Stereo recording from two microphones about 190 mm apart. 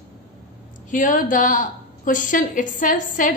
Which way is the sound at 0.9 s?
45° left (ahead or behind).